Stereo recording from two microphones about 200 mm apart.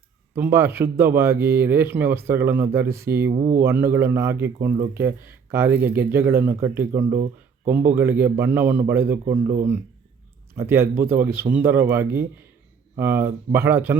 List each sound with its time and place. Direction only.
0.3 s speech: 10° right (ahead or behind)
3.3 s speech: 35° right (ahead or behind)
3.6 s speech: 10° right (ahead or behind)
10.5 s speech: 10° right (ahead or behind)